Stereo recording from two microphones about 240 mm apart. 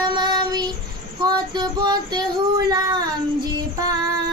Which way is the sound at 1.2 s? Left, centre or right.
Centre.